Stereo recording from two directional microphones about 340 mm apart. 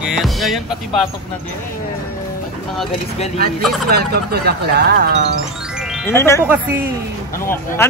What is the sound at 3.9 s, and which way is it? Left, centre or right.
Speech, right.